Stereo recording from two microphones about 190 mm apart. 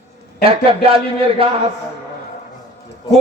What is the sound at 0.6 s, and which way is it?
Speech, 30° right (ahead or behind).